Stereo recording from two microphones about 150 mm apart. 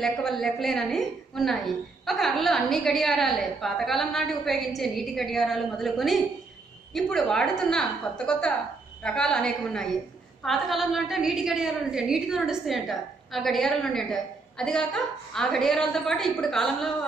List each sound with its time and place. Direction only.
0.0 s a woman's voice: centre (ahead or behind)